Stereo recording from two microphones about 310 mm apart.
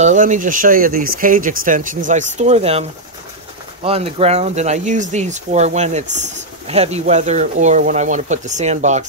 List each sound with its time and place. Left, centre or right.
0.0 s speech: right
3.8 s speech: centre